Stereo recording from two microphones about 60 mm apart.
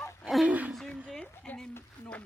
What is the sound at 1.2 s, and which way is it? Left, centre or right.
Speech, centre.